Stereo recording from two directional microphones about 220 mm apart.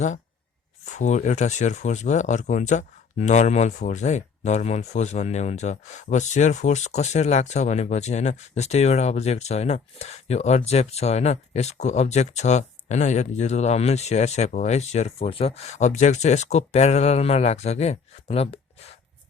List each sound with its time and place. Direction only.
0.9 s speech: 30° left (ahead or behind)